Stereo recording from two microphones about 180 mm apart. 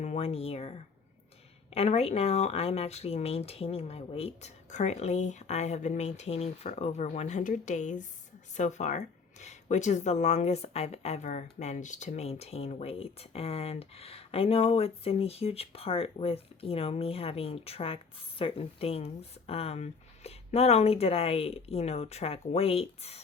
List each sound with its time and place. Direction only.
0.0 s speech: 35° left (ahead or behind)
1.7 s speech: 35° left (ahead or behind)